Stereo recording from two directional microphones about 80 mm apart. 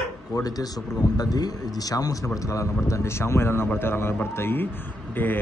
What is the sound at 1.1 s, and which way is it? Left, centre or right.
A man's voice, left.